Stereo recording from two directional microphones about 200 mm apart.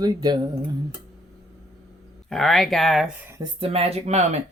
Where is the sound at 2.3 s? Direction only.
Centre (ahead or behind).